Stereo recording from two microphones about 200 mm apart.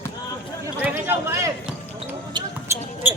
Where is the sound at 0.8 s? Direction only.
10° right (ahead or behind).